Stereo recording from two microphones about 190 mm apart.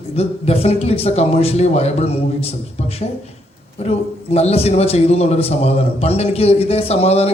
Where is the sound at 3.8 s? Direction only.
35° left (ahead or behind).